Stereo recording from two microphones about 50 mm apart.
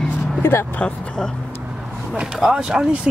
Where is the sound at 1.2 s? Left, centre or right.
Centre.